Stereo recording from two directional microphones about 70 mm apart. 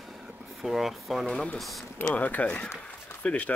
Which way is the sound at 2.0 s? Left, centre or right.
Left.